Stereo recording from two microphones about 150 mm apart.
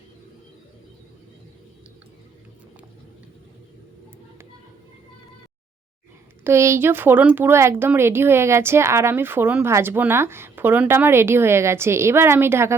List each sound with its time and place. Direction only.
6.4 s speech: 15° right (ahead or behind)